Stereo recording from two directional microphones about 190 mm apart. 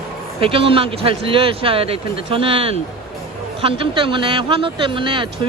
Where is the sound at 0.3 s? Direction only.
30° right (ahead or behind).